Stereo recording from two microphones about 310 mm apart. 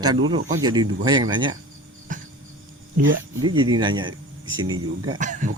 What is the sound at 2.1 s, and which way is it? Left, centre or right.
Cricket, right.